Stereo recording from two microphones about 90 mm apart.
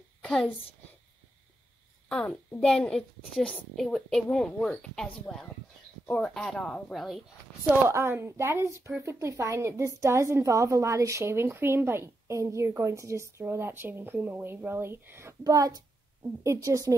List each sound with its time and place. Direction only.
0.2 s a sound: 5° left (ahead or behind)
2.0 s a child's voice: 10° left (ahead or behind)
7.9 s a woman's voice: 30° right (ahead or behind)
15.4 s a woman's voice: 40° right (ahead or behind)